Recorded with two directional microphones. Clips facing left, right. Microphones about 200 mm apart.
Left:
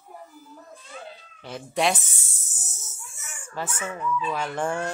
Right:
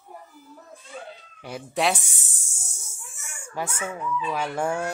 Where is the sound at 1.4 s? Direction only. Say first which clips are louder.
Even; 5° right (ahead or behind).